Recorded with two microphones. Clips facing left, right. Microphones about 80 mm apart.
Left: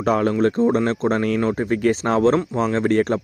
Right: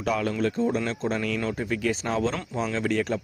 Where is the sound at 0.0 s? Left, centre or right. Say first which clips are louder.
Left 7 dB; left.